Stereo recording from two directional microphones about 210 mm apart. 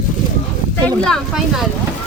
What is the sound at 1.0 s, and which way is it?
Speech, centre (ahead or behind).